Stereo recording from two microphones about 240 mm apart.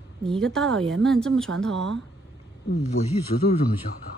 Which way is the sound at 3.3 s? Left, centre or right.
Left.